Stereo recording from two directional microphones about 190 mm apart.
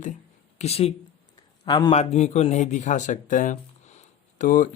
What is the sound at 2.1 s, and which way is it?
Speech, 35° left (ahead or behind).